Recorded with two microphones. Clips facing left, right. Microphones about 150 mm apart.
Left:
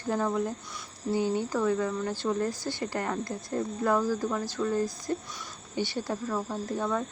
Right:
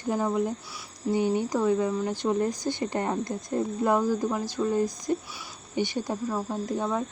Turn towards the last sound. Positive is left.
turn(degrees=-15)  # may be behind; listen again after turning